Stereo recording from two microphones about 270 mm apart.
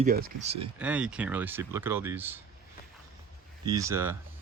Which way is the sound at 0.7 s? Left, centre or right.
Centre.